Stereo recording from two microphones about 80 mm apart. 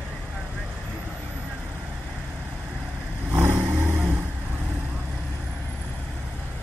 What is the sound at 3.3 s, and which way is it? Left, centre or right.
Vehicle, right.